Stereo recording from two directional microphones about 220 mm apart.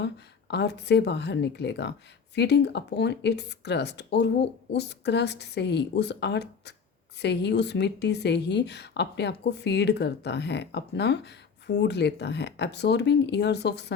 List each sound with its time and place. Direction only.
0.0 s speech: 50° left (ahead or behind)